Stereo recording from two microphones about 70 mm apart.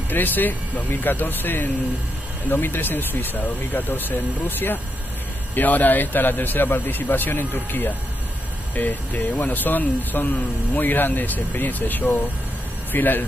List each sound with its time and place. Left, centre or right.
0.1 s speech: left